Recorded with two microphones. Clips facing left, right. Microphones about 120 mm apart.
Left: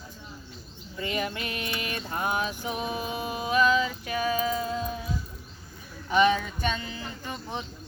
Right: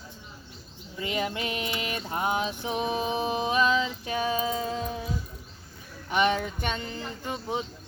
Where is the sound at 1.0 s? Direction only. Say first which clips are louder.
Right 1 dB; 25° right (ahead or behind).